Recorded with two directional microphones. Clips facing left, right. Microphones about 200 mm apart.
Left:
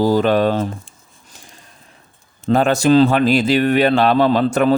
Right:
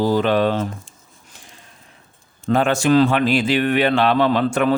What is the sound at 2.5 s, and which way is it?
Speech, 40° left (ahead or behind).